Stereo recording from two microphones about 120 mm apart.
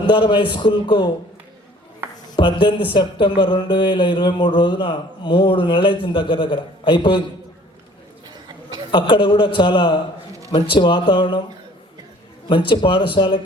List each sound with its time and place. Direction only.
0.1 s speech: 45° left (ahead or behind)
2.3 s speech: 40° left (ahead or behind)
8.9 s speech: 40° left (ahead or behind)
12.5 s speech: 45° left (ahead or behind)